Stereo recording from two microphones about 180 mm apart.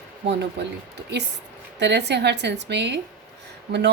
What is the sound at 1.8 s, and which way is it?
Speech, 70° right (ahead or behind).